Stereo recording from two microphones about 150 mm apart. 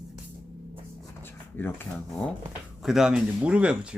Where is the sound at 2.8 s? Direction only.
5° right (ahead or behind).